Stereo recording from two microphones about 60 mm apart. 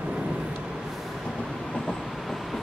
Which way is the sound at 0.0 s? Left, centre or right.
Centre.